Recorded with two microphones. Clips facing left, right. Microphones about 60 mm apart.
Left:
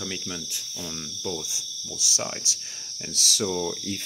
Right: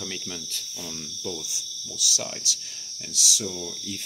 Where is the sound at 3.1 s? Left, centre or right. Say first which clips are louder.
Left 4 dB; left.